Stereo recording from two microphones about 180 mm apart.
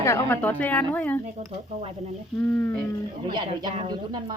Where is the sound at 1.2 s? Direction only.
40° right (ahead or behind).